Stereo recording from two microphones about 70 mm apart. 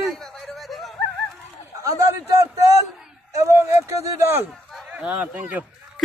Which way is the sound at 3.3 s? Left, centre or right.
Right.